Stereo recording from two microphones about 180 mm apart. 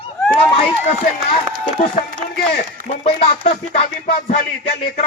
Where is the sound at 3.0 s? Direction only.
35° left (ahead or behind).